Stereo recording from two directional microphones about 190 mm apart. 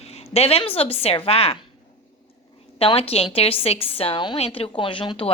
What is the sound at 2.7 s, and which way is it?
A woman's voice, 30° left (ahead or behind).